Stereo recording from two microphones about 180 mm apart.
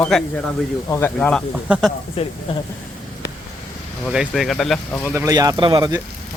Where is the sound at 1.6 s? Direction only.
5° right (ahead or behind).